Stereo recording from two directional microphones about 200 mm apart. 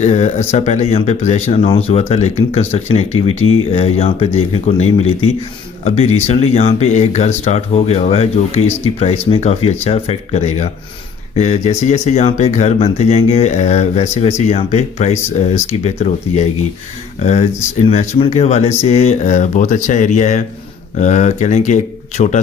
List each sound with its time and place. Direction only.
0.0 s speech: 30° left (ahead or behind)
3.3 s speech: 90° left
3.7 s speech: 30° left (ahead or behind)